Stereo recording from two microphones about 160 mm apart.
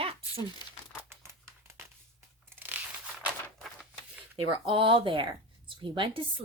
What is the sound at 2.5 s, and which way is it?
Crunch, 15° right (ahead or behind).